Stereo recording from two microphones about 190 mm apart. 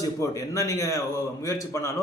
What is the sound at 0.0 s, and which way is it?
A man's voice, 15° left (ahead or behind).